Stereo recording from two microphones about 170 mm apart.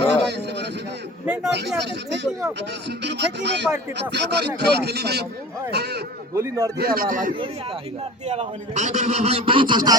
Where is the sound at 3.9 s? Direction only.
80° right.